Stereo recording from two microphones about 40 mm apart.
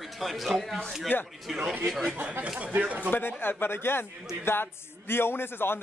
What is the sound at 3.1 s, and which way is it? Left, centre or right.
Speech, left.